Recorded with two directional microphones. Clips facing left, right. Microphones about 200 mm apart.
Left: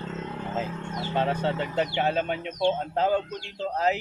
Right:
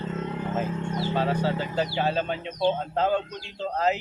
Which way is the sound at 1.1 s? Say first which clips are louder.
Left 1 dB; 25° left (ahead or behind).